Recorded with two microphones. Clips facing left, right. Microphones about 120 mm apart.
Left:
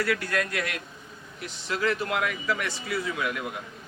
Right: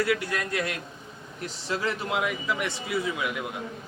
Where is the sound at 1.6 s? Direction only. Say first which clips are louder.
Left 2 dB; 25° right (ahead or behind).